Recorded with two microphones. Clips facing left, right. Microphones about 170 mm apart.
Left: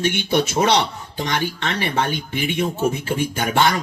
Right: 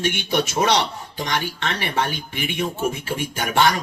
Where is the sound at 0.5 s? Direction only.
25° left (ahead or behind).